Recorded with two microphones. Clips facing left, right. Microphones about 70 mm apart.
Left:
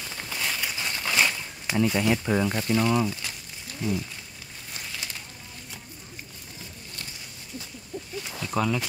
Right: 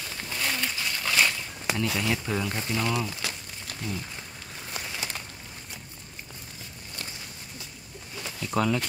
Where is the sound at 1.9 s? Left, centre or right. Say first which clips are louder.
Left 5 dB; centre.